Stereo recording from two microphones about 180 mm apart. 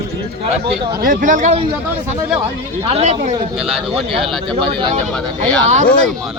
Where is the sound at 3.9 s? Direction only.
30° right (ahead or behind).